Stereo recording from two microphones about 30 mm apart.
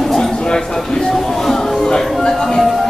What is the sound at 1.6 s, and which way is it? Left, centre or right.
Music, left.